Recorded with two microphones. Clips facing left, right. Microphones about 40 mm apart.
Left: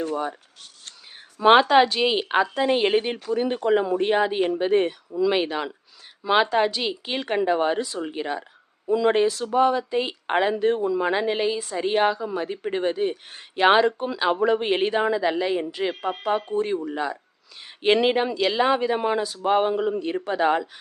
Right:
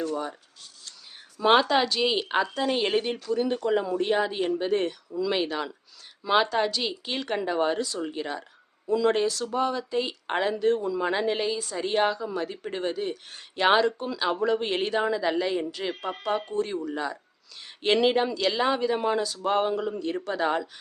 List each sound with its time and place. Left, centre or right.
0.0 s speech: left
1.4 s speech: left